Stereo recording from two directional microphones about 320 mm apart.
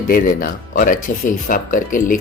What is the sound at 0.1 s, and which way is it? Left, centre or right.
Speech, left.